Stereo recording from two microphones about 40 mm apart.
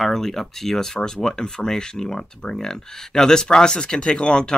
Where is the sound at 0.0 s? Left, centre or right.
Centre.